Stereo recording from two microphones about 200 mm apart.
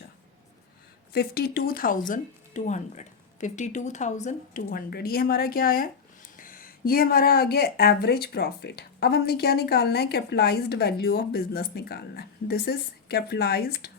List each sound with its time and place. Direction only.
1.1 s speech: 50° left (ahead or behind)